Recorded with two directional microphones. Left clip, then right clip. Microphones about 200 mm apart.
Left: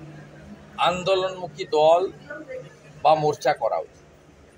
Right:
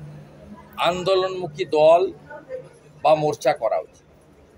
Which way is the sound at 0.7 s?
20° right (ahead or behind).